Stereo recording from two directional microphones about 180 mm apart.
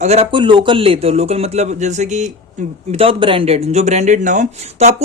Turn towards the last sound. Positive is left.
turn(degrees=-35)  # may be behind; listen again after turning